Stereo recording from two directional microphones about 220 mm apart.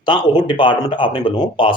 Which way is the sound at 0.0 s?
20° left (ahead or behind).